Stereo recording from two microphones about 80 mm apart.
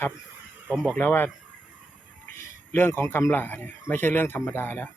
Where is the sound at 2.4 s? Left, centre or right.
Left.